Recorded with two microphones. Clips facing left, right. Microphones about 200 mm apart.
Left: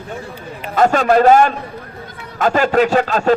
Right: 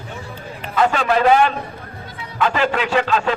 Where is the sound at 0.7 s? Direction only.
45° left (ahead or behind).